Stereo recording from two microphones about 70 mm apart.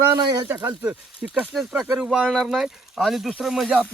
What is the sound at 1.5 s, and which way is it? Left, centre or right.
Speech, centre.